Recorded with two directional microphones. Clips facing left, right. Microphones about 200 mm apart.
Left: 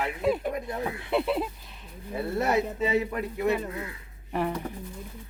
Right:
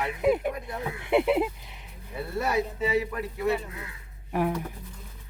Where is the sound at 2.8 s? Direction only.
20° left (ahead or behind).